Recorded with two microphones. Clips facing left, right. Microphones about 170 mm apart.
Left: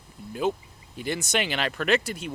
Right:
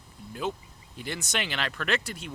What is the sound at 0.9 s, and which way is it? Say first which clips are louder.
Speech: left 6 dB; 10° left (ahead or behind).